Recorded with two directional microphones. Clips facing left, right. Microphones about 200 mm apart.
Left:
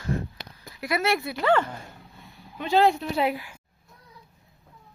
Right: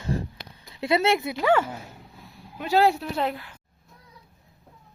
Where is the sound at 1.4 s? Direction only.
10° right (ahead or behind); by 3.5 s 10° left (ahead or behind).